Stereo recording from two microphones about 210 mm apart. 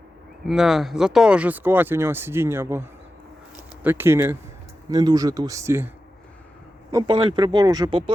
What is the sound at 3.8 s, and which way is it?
Speech, 10° right (ahead or behind).